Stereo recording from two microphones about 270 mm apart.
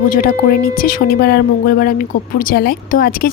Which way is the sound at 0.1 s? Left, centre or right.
Left.